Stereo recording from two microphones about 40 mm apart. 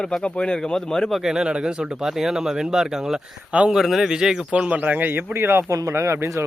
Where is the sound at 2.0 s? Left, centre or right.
Centre.